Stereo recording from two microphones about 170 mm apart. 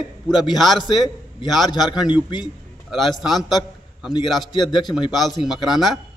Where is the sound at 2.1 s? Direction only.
25° left (ahead or behind).